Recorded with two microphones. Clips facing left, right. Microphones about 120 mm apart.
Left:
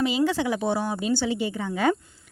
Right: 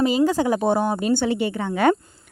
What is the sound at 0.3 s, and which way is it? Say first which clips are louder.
Speech: right 5 dB; 40° right (ahead or behind).